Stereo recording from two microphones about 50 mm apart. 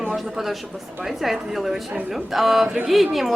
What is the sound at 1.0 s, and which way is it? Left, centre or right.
A woman's voice, centre.